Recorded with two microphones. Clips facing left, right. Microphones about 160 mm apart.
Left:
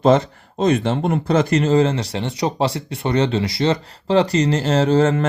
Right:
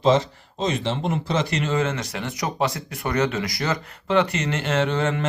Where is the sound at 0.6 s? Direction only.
55° left (ahead or behind).